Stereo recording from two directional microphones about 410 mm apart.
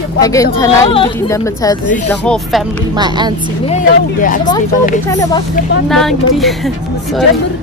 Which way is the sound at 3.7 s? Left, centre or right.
Centre.